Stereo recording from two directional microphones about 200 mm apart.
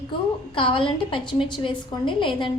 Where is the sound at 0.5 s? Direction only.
25° left (ahead or behind).